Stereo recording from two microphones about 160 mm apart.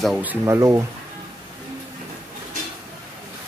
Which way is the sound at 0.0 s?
5° right (ahead or behind).